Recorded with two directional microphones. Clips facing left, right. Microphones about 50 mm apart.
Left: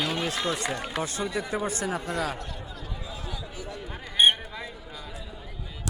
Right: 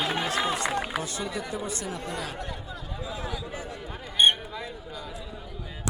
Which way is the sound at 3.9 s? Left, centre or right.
Centre.